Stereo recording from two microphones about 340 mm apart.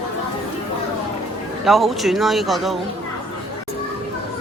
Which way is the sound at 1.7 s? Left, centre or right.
Centre.